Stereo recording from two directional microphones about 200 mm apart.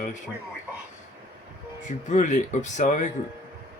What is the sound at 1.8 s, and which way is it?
Speech, 40° left (ahead or behind).